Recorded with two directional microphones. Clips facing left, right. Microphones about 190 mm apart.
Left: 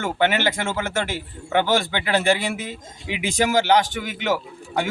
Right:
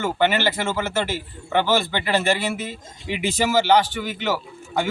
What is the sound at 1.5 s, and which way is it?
Speech, 15° left (ahead or behind).